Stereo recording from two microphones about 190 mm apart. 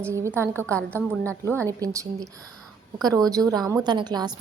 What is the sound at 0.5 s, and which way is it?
A woman's voice, 5° left (ahead or behind).